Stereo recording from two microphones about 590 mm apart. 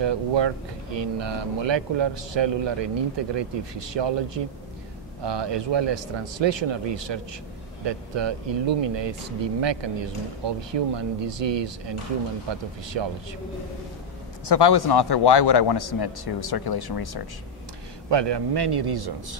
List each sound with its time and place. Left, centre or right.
0.0 s speech: right
12.9 s speech: right
14.4 s a man's voice: left
18.1 s a man's voice: right